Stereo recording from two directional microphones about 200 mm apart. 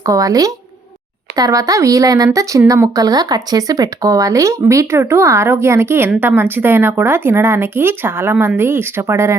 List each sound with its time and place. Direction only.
0.0 s speech: 15° right (ahead or behind)